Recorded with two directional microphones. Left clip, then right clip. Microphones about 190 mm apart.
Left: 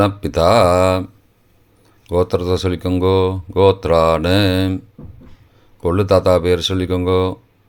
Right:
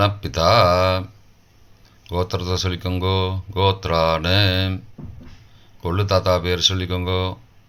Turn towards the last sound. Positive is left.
turn(degrees=45)  # may be behind; listen again after turning